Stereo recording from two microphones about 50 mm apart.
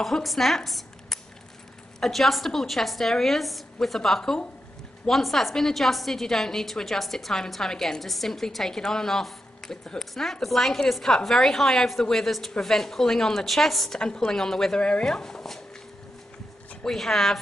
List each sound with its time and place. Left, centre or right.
0.0 s a woman's voice: centre
4.2 s a woman's voice: centre
5.0 s a woman's voice: centre
16.8 s a woman's voice: centre